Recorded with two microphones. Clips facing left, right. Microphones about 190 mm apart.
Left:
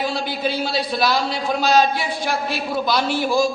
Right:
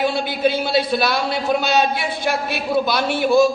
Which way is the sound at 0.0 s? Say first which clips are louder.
Right 4 dB; 60° right (ahead or behind).